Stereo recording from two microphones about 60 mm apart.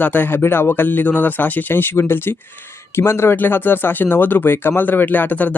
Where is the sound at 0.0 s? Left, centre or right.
Left.